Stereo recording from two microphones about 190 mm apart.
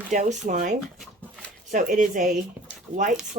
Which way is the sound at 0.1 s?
40° right (ahead or behind).